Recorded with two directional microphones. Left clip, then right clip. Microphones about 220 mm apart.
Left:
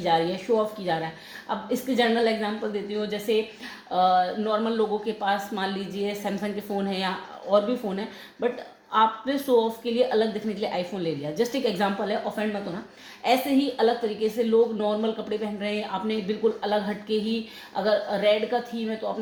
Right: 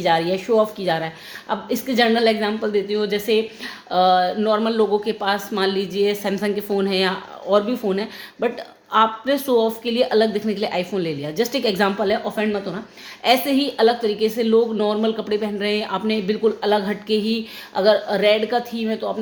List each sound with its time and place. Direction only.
0.0 s a woman's voice: 40° right (ahead or behind)